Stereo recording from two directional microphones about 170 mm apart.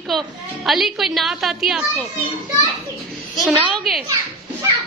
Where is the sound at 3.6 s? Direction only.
Centre (ahead or behind).